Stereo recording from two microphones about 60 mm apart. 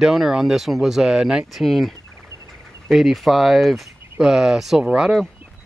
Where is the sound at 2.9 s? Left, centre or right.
Centre.